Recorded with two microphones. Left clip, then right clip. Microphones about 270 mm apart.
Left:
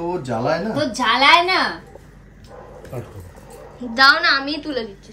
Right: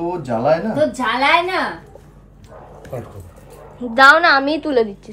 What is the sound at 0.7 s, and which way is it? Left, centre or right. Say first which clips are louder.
Speech: even; centre.